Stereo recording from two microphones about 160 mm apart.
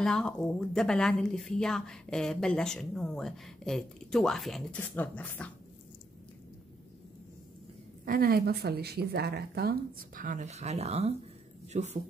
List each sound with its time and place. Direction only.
0.0 s speech: 5° left (ahead or behind)
8.0 s speech: 65° right (ahead or behind); by 12.0 s 45° right (ahead or behind)